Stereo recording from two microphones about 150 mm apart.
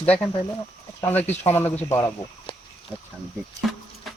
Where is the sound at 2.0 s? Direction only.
30° left (ahead or behind).